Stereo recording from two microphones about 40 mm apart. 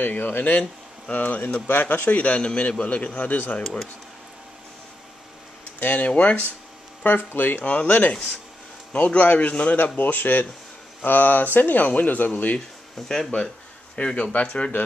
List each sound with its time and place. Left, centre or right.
0.0 s a man's voice: left
5.8 s speech: left
6.0 s a man's voice: left
7.0 s a man's voice: left
9.2 s a man's voice: left
9.9 s speech: left
13.3 s a man's voice: left